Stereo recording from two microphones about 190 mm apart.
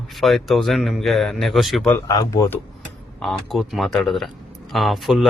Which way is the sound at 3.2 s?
Centre (ahead or behind).